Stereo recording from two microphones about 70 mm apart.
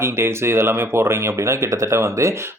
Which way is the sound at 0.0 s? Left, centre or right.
Right.